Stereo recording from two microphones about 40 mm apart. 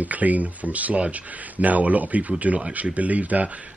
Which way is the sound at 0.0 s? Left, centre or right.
Right.